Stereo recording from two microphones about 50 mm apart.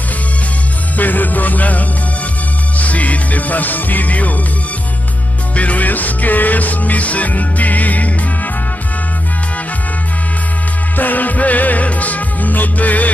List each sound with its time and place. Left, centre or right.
0.9 s music: left
5.6 s music: left
11.0 s music: left